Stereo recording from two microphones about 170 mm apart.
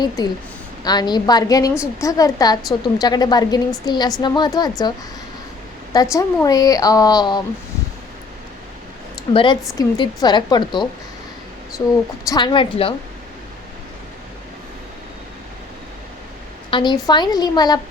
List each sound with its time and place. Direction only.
0.9 s a woman's voice: 25° left (ahead or behind)
5.9 s a woman's voice: 20° left (ahead or behind)
9.3 s a woman's voice: 30° left (ahead or behind)
16.6 s a woman's voice: 30° left (ahead or behind)